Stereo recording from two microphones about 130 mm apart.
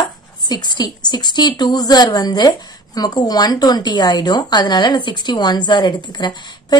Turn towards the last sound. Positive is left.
turn(degrees=35)  # may be behind; listen again after turning